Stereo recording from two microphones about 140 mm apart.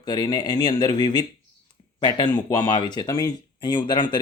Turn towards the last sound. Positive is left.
turn(degrees=30)  # may be behind; listen again after turning